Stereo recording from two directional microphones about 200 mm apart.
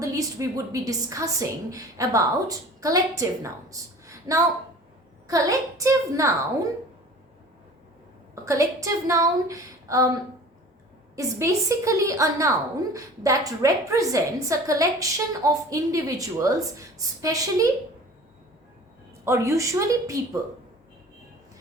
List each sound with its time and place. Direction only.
0.0 s a woman's voice: 15° right (ahead or behind)
8.4 s a woman's voice: 15° right (ahead or behind)
11.2 s a woman's voice: 15° right (ahead or behind)
19.2 s a woman's voice: 15° right (ahead or behind)